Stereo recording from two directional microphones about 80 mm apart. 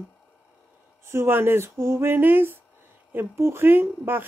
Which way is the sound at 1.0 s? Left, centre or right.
Right.